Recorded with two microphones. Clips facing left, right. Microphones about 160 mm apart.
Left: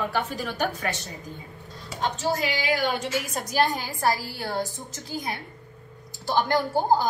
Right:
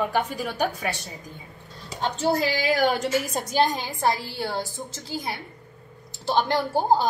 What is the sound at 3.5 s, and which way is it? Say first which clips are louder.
A woman's voice: right 1 dB; 25° right (ahead or behind).